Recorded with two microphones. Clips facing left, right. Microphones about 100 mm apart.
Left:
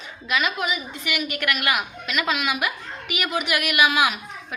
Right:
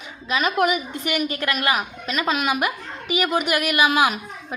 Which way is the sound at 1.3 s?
30° right (ahead or behind).